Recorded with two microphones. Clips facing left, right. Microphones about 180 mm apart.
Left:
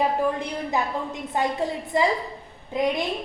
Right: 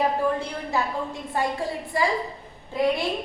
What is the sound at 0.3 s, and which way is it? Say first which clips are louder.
A woman's voice: left 1 dB; 20° left (ahead or behind).